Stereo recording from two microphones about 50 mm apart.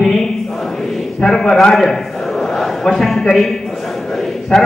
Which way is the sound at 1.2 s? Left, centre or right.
Centre.